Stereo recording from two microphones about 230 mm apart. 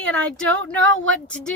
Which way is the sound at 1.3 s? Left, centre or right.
Centre.